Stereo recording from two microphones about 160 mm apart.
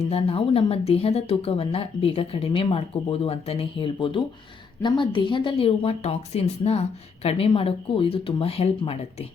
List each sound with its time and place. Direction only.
0.0 s a woman's voice: 35° left (ahead or behind)